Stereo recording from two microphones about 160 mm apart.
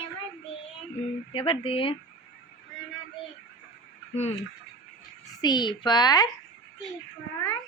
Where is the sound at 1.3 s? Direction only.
35° left (ahead or behind).